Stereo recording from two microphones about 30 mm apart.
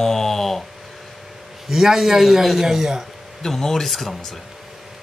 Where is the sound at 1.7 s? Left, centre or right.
Centre.